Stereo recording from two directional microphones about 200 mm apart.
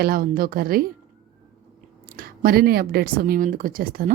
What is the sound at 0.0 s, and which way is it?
Speech, 50° right (ahead or behind).